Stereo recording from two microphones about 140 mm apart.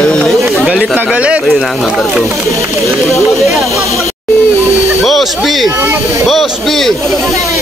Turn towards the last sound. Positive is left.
turn(degrees=0)  # may be behind; listen again after turning